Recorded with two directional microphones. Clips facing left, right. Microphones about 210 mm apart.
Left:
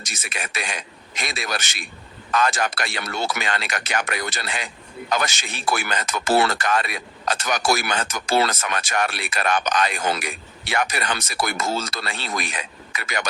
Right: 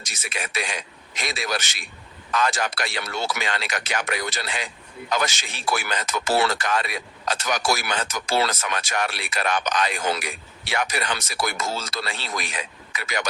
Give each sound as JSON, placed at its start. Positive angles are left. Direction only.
{"t": 0.0, "sound": "speech", "side_deg": 50}